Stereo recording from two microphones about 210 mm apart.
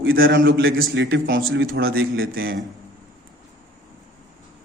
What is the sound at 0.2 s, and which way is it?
Speech, 55° right (ahead or behind).